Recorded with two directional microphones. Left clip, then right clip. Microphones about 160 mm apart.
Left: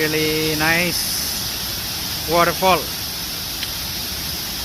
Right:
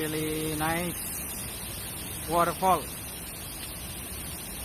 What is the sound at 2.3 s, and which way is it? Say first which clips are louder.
Speech: left 8 dB; 10° left (ahead or behind).